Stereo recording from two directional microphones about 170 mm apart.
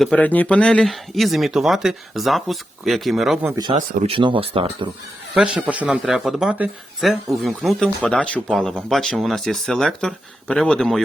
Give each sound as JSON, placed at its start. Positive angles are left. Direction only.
{"t": 0.0, "sound": "speech", "side_deg": 5}
{"t": 3.4, "sound": "speech", "side_deg": -20}
{"t": 5.3, "sound": "speech", "side_deg": -5}